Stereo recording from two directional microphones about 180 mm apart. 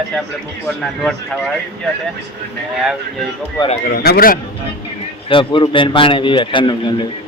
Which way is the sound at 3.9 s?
55° left (ahead or behind).